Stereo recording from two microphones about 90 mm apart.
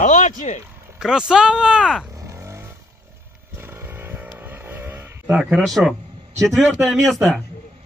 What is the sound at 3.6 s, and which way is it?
Vehicle, 25° right (ahead or behind).